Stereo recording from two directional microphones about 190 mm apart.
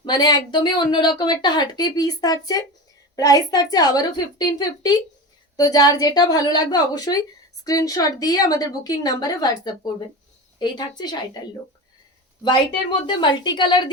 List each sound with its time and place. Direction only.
0.0 s a woman's voice: 20° left (ahead or behind)
10.6 s a woman's voice: 20° left (ahead or behind)
12.5 s a woman's voice: 25° left (ahead or behind)